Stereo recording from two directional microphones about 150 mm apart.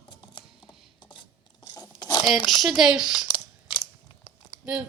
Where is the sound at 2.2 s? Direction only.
Centre (ahead or behind).